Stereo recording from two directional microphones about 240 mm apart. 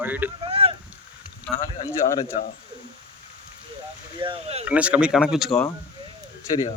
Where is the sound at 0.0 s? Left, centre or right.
Centre.